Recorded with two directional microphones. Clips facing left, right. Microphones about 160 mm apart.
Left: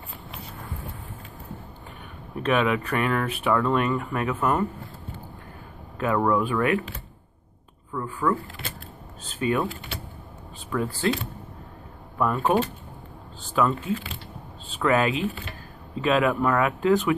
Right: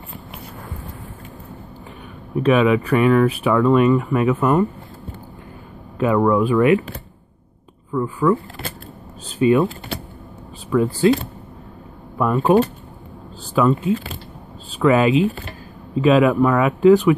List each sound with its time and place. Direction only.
2.5 s speech: 5° right (ahead or behind)
5.9 s speech: 15° right (ahead or behind)
7.9 s speech: 15° right (ahead or behind)
9.4 s speech: 20° right (ahead or behind)
10.7 s speech: 15° right (ahead or behind)
12.2 s speech: 15° right (ahead or behind)
13.6 s speech: 15° right (ahead or behind)